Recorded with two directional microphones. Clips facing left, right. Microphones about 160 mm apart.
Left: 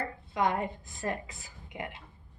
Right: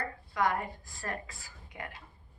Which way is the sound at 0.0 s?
20° left (ahead or behind).